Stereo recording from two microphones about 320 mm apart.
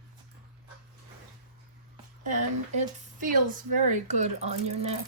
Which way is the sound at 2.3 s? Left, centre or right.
Right.